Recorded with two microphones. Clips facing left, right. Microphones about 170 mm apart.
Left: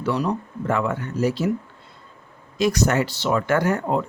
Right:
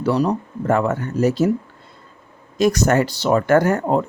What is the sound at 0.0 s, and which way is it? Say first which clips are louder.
Speech: right 5 dB; 35° right (ahead or behind).